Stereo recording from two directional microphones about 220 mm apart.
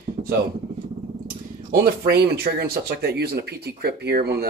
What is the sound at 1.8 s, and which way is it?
Speech, 45° right (ahead or behind).